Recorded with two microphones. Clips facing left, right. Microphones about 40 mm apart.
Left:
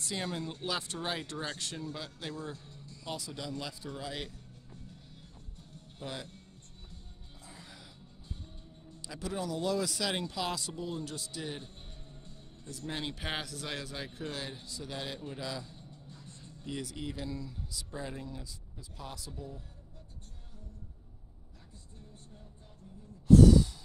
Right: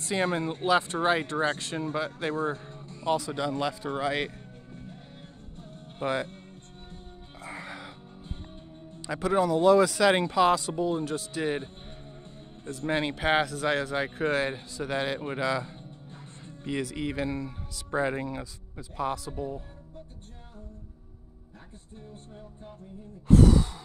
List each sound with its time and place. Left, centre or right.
0.0 s speech: right
5.6 s music: right
7.4 s music: right
8.9 s speech: right
23.2 s sigh: right